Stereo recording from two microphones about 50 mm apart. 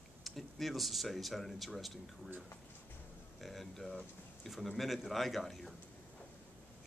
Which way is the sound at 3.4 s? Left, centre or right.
Centre.